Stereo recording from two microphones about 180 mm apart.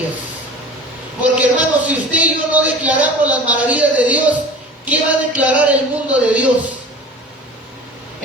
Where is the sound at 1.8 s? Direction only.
10° right (ahead or behind).